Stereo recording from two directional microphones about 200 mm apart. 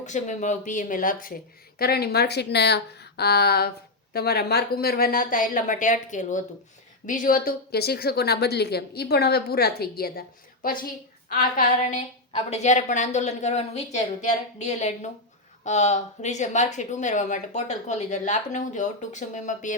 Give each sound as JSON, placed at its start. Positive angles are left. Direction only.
{"t": 0.0, "sound": "a woman's voice", "side_deg": 35}